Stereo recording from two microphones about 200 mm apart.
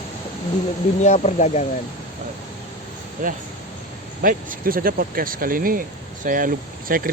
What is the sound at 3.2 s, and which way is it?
Speech, 45° right (ahead or behind).